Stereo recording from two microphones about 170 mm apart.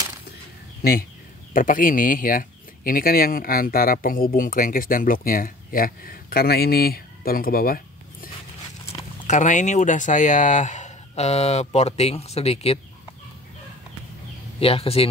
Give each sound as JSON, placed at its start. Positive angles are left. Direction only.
{"t": 0.8, "sound": "speech", "side_deg": 65}
{"t": 1.5, "sound": "speech", "side_deg": 55}
{"t": 9.3, "sound": "speech", "side_deg": 45}
{"t": 14.6, "sound": "speech", "side_deg": 35}